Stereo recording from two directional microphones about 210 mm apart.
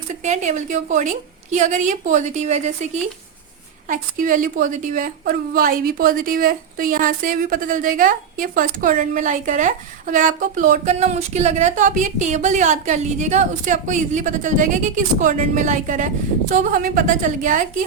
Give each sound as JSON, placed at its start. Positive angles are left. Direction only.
{"t": 0.2, "sound": "a woman's voice", "side_deg": -35}
{"t": 3.8, "sound": "a woman's voice", "side_deg": -40}